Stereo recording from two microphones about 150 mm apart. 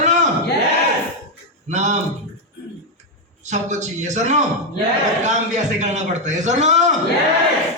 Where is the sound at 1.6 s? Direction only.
50° right (ahead or behind).